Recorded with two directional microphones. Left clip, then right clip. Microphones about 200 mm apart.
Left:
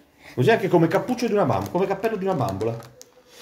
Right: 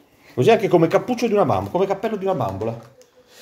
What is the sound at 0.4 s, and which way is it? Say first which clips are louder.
Speech: right 3 dB; 35° right (ahead or behind).